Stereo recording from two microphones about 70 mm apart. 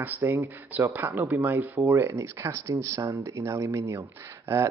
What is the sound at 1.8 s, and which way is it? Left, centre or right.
Speech, right.